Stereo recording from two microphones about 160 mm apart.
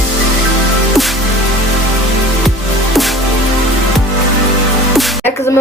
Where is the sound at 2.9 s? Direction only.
Centre (ahead or behind).